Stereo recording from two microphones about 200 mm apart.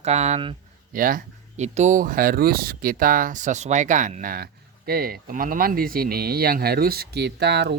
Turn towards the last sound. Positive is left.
turn(degrees=-60)  # may be behind; listen again after turning